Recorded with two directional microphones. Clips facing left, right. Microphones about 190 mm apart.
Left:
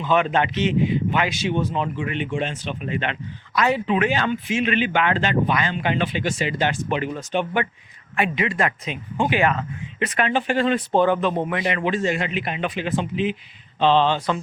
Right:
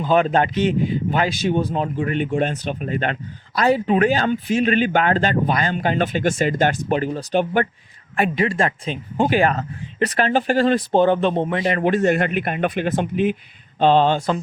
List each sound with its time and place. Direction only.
0.0 s speech: 35° right (ahead or behind)
11.8 s speech: 55° right (ahead or behind)